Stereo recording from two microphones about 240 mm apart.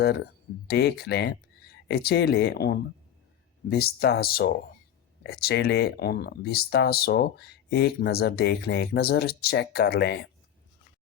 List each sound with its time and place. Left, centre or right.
0.7 s speech: left